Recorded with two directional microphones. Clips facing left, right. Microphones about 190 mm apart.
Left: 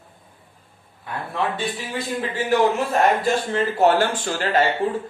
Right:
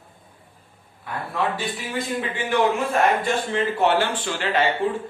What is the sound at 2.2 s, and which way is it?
A man's voice, 35° left (ahead or behind).